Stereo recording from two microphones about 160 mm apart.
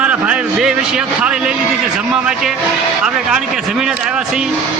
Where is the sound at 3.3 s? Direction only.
5° right (ahead or behind).